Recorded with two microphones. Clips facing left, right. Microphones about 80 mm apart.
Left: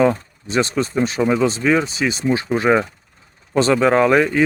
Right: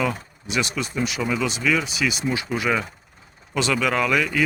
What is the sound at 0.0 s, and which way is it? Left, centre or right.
Speech, left.